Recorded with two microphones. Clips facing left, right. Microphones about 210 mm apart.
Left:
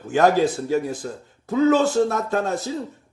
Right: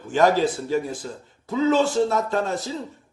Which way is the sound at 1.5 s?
50° left (ahead or behind).